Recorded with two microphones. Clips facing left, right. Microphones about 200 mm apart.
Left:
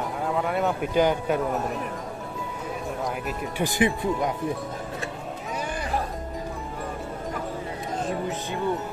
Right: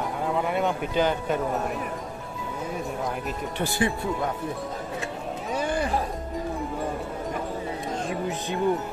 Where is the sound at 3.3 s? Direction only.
15° left (ahead or behind).